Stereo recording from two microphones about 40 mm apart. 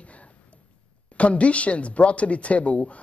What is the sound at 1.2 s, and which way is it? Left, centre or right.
A man's voice, left.